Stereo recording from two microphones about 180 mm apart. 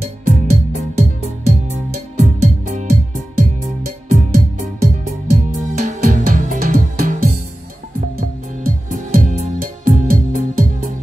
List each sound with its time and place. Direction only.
0.0 s music: 40° right (ahead or behind)
9.1 s music: 50° right (ahead or behind)